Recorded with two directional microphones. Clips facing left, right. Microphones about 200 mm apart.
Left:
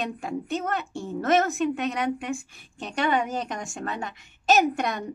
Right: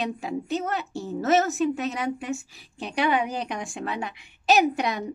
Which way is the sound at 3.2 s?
45° left (ahead or behind).